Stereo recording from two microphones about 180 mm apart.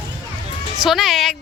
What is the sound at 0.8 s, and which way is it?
Speech, centre (ahead or behind).